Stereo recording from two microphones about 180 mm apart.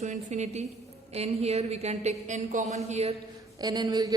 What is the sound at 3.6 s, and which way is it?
Speech, 20° right (ahead or behind).